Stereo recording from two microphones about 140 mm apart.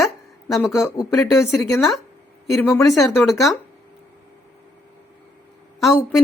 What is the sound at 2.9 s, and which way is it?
Speech, centre (ahead or behind).